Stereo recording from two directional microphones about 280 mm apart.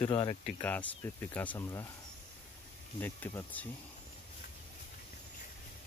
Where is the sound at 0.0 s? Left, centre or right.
Left.